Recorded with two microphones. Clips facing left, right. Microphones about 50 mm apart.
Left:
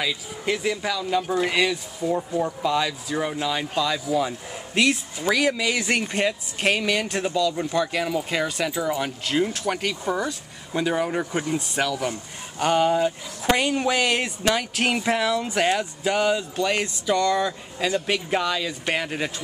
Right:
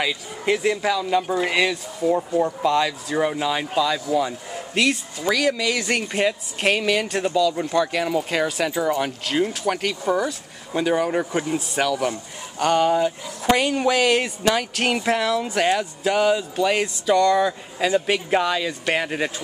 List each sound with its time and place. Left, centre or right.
0.0 s speech: centre